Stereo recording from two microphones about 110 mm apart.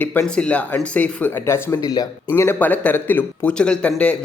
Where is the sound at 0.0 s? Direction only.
15° left (ahead or behind).